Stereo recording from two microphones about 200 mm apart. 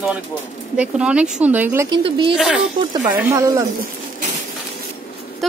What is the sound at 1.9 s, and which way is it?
Speech, 25° right (ahead or behind).